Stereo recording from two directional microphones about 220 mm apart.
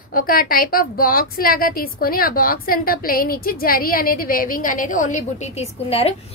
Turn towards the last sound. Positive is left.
turn(degrees=25)  # may be behind; listen again after turning